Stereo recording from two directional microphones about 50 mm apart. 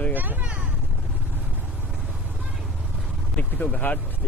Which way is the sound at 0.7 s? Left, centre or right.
Right.